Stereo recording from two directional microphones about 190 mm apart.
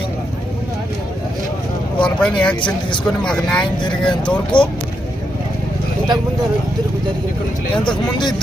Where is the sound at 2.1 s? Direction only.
5° left (ahead or behind).